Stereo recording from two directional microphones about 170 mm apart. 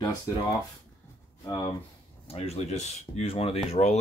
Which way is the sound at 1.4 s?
20° left (ahead or behind).